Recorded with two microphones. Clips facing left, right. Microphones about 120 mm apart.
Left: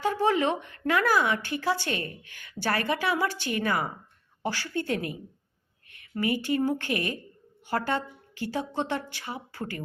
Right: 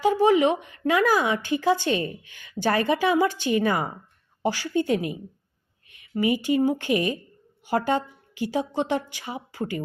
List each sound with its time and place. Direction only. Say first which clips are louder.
0.0 s speech: right 6 dB; 15° right (ahead or behind)